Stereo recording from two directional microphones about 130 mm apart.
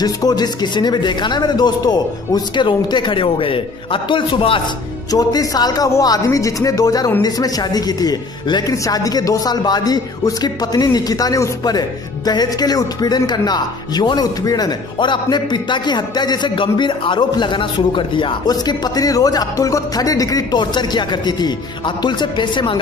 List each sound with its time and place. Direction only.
0.0 s speech: 30° left (ahead or behind)
5.1 s speech: 30° left (ahead or behind)